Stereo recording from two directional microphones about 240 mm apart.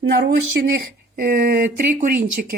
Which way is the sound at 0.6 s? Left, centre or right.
Right.